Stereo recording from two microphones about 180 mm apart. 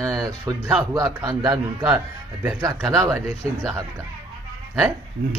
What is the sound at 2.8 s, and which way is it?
Speech, centre (ahead or behind).